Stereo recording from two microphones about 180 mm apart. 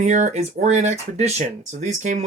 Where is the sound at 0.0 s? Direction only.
40° right (ahead or behind).